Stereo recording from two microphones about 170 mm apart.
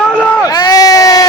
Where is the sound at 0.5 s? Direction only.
20° left (ahead or behind).